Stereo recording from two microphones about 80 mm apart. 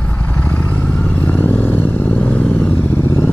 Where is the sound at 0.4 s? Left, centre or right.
Centre.